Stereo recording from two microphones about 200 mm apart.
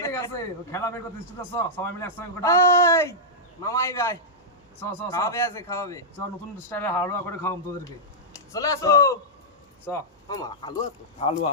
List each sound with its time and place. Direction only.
0.0 s a man's voice: 15° left (ahead or behind)